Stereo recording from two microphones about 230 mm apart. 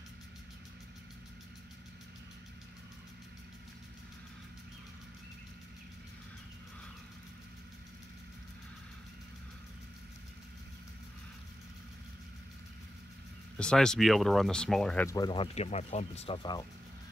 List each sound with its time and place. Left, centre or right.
13.6 s speech: centre
15.0 s speech: centre